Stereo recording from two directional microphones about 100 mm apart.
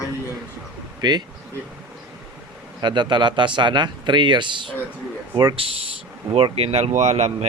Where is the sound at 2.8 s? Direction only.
50° right (ahead or behind).